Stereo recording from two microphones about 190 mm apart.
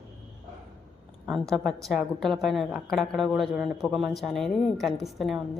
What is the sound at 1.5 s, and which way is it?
A woman's voice, centre (ahead or behind).